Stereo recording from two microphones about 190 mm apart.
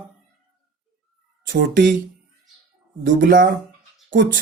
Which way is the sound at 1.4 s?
45° right (ahead or behind).